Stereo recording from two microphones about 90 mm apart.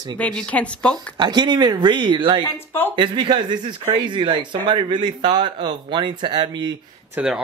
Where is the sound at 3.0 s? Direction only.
65° right (ahead or behind).